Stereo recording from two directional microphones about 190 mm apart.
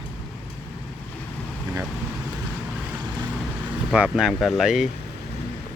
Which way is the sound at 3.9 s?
5° right (ahead or behind).